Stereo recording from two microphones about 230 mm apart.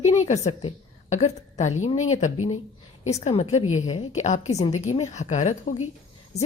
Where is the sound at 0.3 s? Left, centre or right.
Left.